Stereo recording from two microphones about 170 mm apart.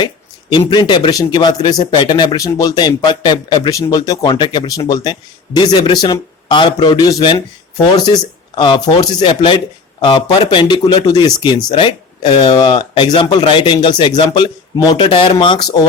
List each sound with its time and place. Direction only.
0.7 s speech: 25° left (ahead or behind)